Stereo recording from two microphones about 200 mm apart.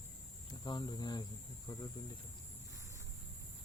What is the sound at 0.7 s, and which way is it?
Speech, 20° left (ahead or behind).